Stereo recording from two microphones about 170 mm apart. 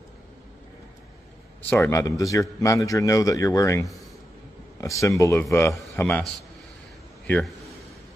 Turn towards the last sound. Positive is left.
turn(degrees=10)  # may be behind; listen again after turning